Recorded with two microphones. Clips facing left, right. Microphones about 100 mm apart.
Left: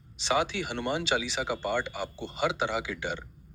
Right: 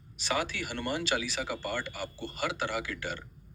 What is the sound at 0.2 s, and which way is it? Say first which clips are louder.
A man's voice: left 4 dB; 20° left (ahead or behind).